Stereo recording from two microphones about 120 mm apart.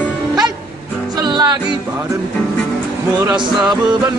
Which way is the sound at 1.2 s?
35° right (ahead or behind).